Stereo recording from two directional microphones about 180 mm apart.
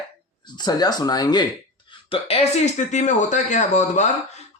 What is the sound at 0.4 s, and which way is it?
Speech, 25° left (ahead or behind).